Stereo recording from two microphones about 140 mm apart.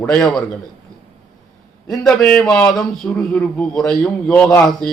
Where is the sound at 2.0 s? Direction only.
5° left (ahead or behind).